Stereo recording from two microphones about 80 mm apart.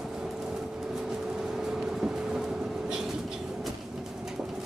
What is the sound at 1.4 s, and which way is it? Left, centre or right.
Vehicle, centre.